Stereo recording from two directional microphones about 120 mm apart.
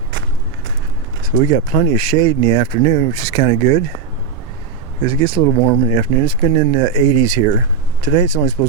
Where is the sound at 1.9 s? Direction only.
40° right (ahead or behind).